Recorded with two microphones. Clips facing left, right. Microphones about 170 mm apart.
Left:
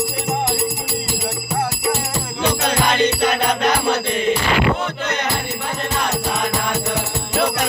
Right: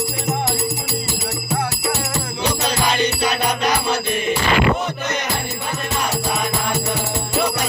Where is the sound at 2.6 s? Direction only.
55° left (ahead or behind).